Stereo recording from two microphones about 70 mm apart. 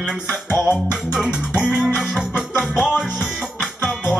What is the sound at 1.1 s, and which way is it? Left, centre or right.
Music, centre.